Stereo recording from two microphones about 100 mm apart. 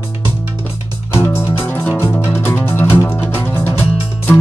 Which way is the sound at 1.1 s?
25° left (ahead or behind).